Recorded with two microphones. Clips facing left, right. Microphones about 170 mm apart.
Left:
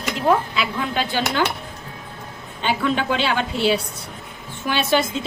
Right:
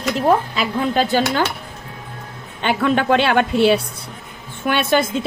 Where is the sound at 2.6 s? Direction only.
60° right (ahead or behind).